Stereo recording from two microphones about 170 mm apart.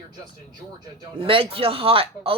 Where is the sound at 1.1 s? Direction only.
30° right (ahead or behind).